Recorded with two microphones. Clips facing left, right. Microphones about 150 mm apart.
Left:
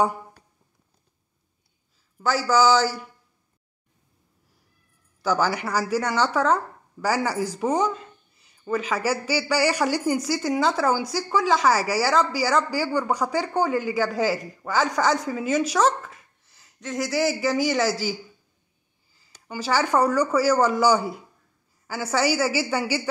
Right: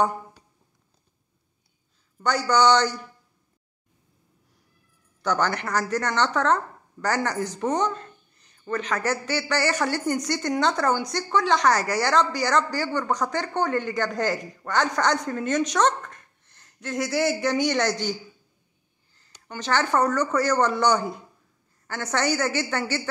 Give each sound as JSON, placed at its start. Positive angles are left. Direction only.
{"t": 2.1, "sound": "speech", "side_deg": 0}
{"t": 5.2, "sound": "speech", "side_deg": 5}
{"t": 19.1, "sound": "a woman's voice", "side_deg": 5}